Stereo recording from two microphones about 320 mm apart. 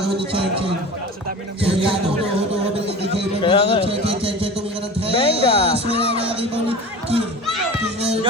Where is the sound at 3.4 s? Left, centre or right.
Centre.